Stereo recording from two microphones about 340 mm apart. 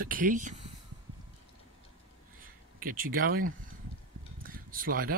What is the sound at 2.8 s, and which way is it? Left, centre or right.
Speech, right.